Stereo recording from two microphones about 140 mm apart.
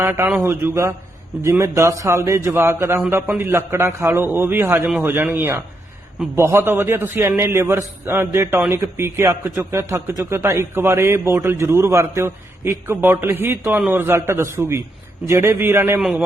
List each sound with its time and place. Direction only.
0.0 s a man's voice: 15° right (ahead or behind)
16.0 s a man's voice: 5° right (ahead or behind)